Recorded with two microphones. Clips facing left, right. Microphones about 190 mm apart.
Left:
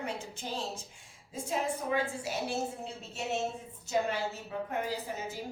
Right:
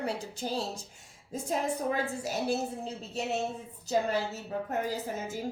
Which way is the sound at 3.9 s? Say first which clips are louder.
Right 2 dB; 40° right (ahead or behind).